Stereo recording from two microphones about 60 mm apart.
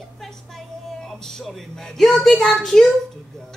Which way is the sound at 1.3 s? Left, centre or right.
Centre.